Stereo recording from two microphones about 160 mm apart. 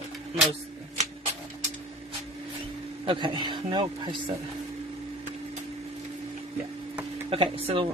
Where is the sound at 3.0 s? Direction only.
30° right (ahead or behind).